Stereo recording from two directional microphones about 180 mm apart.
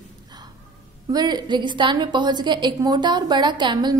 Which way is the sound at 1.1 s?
20° right (ahead or behind).